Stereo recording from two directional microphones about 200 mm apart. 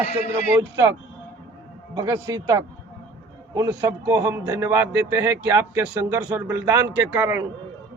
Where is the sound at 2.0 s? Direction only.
15° right (ahead or behind).